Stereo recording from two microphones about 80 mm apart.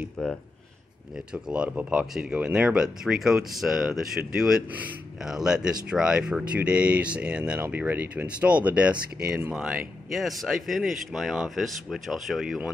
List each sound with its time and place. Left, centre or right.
0.2 s speech: centre
1.1 s speech: centre
7.5 s speech: right
10.1 s speech: centre